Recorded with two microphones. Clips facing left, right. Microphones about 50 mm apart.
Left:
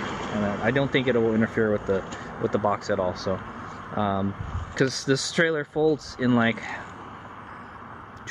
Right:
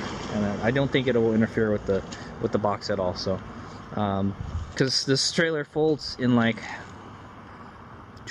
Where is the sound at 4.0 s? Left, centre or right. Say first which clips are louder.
Left 1 dB; centre.